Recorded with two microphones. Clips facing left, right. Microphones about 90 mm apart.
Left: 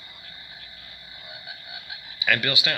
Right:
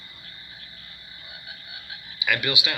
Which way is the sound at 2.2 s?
15° right (ahead or behind).